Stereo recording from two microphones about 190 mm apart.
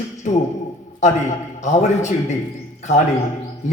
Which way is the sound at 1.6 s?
40° left (ahead or behind).